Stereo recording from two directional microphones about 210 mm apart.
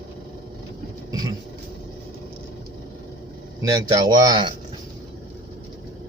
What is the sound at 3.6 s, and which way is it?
Speech, 15° right (ahead or behind).